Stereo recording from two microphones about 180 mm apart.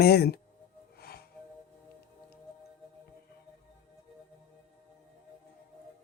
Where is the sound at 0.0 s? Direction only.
60° left (ahead or behind).